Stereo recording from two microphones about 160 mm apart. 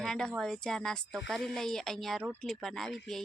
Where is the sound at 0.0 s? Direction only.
5° left (ahead or behind).